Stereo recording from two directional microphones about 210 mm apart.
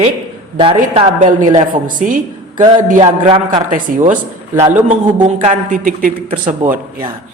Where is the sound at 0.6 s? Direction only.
25° right (ahead or behind).